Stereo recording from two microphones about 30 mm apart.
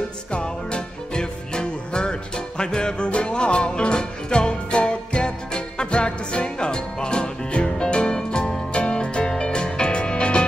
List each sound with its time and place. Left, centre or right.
0.3 s music: left
8.7 s music: left